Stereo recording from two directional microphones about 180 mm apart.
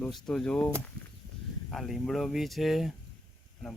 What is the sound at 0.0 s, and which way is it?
Speech, 5° left (ahead or behind).